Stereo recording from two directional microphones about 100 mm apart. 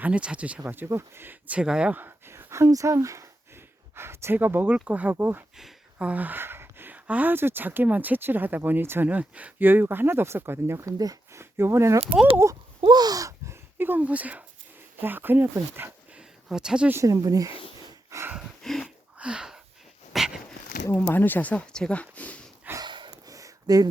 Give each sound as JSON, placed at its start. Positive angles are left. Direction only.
{"t": 0.0, "sound": "speech", "side_deg": -10}
{"t": 5.5, "sound": "speech", "side_deg": -10}
{"t": 10.9, "sound": "speech", "side_deg": -35}
{"t": 12.8, "sound": "speech", "side_deg": -45}
{"t": 16.1, "sound": "a sound", "side_deg": -5}
{"t": 16.9, "sound": "speech", "side_deg": -30}
{"t": 18.3, "sound": "a sound", "side_deg": 5}
{"t": 19.2, "sound": "a sound", "side_deg": -10}
{"t": 20.1, "sound": "dog", "side_deg": -5}
{"t": 20.9, "sound": "speech", "side_deg": 20}
{"t": 22.8, "sound": "snort", "side_deg": -50}
{"t": 23.2, "sound": "a sound", "side_deg": -35}